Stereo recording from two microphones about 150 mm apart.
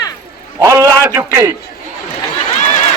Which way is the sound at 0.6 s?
20° right (ahead or behind).